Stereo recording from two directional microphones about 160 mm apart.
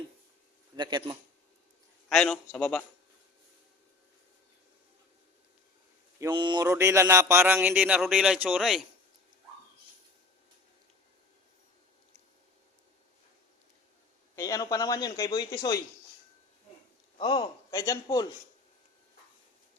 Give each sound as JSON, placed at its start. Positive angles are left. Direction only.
{"t": 0.8, "sound": "speech", "side_deg": -30}
{"t": 2.0, "sound": "a man's voice", "side_deg": 5}
{"t": 6.3, "sound": "speech", "side_deg": -30}
{"t": 14.3, "sound": "a man's voice", "side_deg": 20}
{"t": 17.2, "sound": "a man's voice", "side_deg": 30}